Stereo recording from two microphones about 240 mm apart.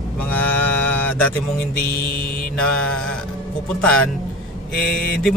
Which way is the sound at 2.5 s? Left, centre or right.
Centre.